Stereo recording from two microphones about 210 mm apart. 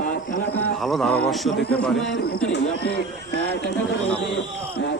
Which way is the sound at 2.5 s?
50° left (ahead or behind).